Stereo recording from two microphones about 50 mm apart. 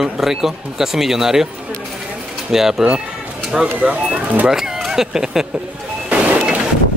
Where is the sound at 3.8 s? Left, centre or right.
Right.